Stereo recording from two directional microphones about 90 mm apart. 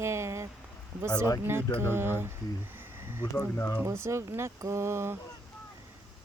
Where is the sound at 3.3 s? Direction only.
30° left (ahead or behind).